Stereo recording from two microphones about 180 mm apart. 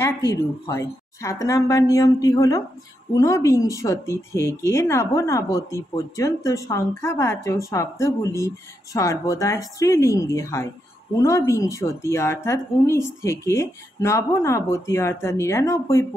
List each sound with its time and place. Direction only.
0.0 s speech: 15° left (ahead or behind)